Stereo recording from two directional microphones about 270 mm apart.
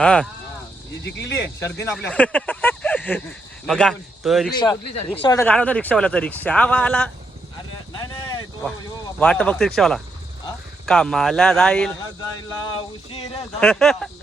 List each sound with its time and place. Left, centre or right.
0.0 s speech: centre
1.0 s speech: left
1.8 s speech: centre
5.2 s speech: centre
7.9 s a sound: centre
9.1 s speech: centre
12.4 s speech: centre
13.6 s speech: centre